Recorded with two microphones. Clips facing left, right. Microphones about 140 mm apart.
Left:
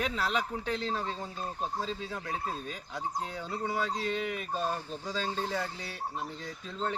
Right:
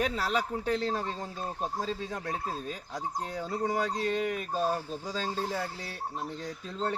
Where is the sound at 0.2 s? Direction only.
40° right (ahead or behind).